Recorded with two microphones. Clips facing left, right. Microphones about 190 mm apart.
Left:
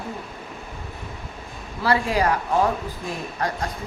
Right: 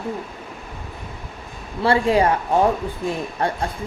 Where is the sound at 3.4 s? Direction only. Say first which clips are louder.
Right 3 dB; 30° right (ahead or behind).